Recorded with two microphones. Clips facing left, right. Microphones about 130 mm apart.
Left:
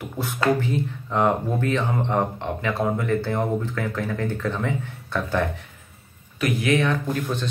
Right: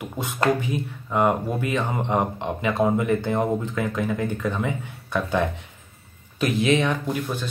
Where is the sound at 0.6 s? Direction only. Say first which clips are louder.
Left 2 dB; 15° right (ahead or behind).